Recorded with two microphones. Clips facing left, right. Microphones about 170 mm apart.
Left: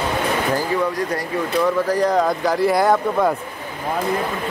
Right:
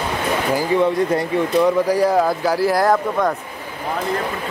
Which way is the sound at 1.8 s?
10° right (ahead or behind).